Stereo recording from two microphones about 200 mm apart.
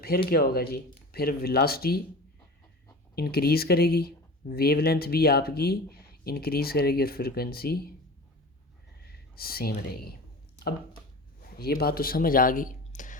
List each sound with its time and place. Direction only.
0.0 s speech: 50° left (ahead or behind)
3.2 s speech: 50° left (ahead or behind)
9.0 s speech: 50° left (ahead or behind)
11.5 s speech: 50° left (ahead or behind)